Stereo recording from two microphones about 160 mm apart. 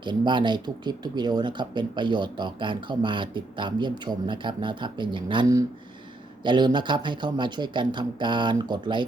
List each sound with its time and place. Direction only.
0.0 s speech: 30° right (ahead or behind)